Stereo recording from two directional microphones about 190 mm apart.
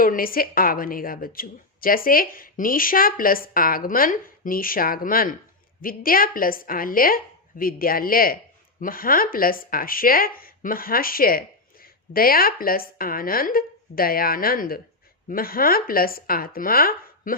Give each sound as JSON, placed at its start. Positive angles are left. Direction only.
{"t": 0.0, "sound": "speech", "side_deg": 50}